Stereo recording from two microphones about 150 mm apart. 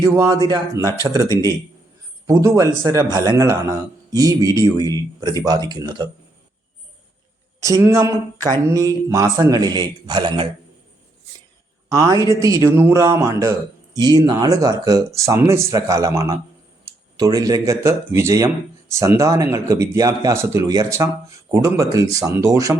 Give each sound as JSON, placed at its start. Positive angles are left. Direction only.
{"t": 0.0, "sound": "a man's voice", "side_deg": -20}
{"t": 7.6, "sound": "a man's voice", "side_deg": -20}
{"t": 11.9, "sound": "a man's voice", "side_deg": -20}